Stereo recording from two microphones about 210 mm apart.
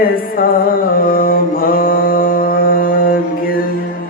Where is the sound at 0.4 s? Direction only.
40° left (ahead or behind).